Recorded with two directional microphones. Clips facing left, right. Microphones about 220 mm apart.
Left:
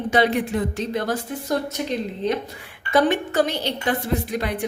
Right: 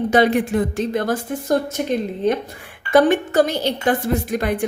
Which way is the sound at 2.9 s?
50° right (ahead or behind).